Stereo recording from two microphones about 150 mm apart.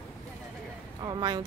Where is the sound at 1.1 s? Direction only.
25° right (ahead or behind).